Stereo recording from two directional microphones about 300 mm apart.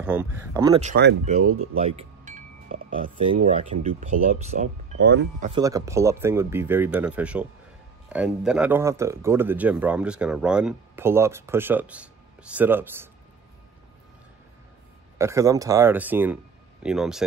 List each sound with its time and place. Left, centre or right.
0.0 s speech: centre
0.8 s speech: right
1.4 s speech: right
1.8 s wind chime: centre
3.4 s speech: centre
5.5 s speech: centre
15.1 s speech: centre